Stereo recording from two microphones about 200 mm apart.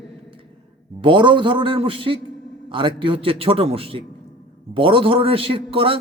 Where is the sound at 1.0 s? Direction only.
25° right (ahead or behind).